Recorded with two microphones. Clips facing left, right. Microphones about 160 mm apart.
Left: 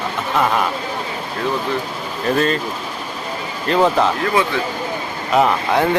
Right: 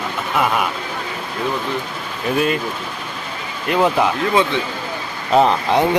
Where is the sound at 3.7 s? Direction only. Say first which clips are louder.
Left 1 dB; 10° right (ahead or behind).